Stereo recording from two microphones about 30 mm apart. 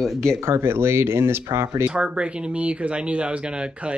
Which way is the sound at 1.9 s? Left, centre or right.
Right.